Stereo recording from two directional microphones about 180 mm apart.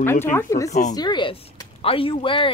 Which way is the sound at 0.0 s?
10° left (ahead or behind).